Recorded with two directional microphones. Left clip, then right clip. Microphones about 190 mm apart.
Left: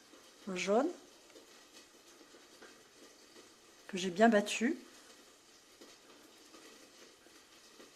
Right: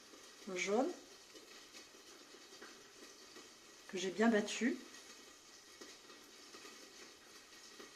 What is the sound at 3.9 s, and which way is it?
Speech, 55° left (ahead or behind).